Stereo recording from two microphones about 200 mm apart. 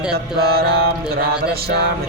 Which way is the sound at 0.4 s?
50° right (ahead or behind).